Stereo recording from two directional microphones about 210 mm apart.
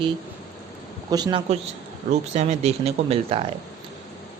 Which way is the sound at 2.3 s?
30° right (ahead or behind).